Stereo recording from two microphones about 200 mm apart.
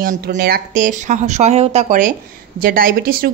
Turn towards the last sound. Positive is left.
turn(degrees=-45)  # may be behind; listen again after turning